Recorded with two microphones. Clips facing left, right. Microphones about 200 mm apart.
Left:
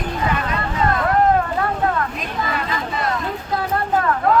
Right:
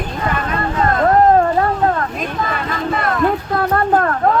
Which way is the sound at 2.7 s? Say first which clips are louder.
Right 4 dB; 55° right (ahead or behind).